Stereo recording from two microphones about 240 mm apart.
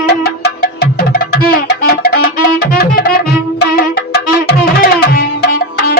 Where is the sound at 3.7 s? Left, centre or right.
Left.